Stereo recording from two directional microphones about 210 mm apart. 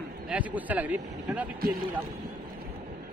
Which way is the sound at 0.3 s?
5° right (ahead or behind).